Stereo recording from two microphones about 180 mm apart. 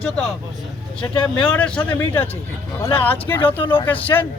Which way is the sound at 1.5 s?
10° left (ahead or behind).